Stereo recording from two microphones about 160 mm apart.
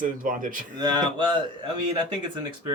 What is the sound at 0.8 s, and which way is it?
Speech, 25° right (ahead or behind).